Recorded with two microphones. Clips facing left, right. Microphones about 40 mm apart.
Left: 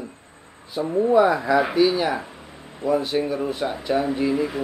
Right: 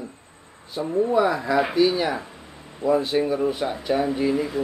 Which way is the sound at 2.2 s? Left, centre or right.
Centre.